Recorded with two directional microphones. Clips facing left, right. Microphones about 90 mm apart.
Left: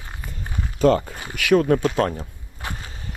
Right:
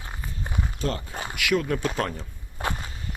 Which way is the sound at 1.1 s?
35° right (ahead or behind).